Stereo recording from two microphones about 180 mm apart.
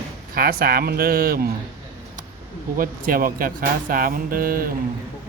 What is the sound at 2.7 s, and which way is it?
Speech, 50° right (ahead or behind).